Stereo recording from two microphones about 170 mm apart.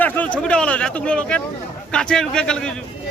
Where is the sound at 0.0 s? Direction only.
10° left (ahead or behind).